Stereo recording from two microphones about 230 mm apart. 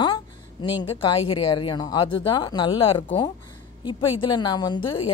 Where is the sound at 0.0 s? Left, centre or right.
Centre.